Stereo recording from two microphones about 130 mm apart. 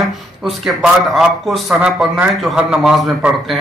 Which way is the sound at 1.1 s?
Centre (ahead or behind).